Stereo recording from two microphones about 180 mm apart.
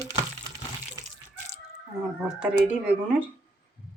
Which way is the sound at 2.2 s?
5° right (ahead or behind).